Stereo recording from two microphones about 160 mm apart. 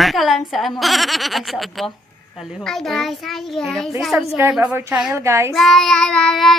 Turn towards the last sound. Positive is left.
turn(degrees=0)  # may be behind; listen again after turning